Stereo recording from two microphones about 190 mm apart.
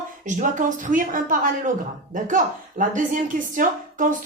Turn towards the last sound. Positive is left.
turn(degrees=-45)  # may be behind; listen again after turning